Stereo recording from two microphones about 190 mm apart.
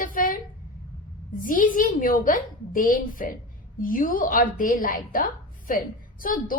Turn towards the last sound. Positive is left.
turn(degrees=45)  # may be behind; listen again after turning